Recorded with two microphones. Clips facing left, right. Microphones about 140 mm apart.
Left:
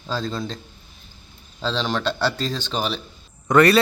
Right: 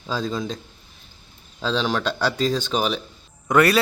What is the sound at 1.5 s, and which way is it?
Speech, 10° right (ahead or behind).